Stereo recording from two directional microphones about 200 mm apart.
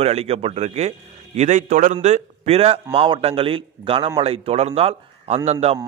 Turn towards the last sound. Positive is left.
turn(degrees=-30)  # may be behind; listen again after turning